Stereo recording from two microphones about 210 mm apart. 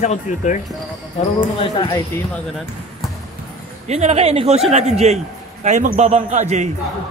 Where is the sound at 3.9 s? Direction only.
30° right (ahead or behind).